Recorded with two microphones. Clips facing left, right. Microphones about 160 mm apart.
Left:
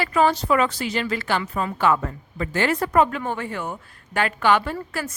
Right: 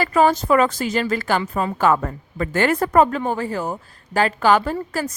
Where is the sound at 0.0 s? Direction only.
40° right (ahead or behind).